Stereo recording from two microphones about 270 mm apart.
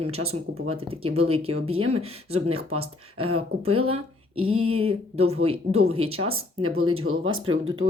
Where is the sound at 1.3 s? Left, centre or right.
Right.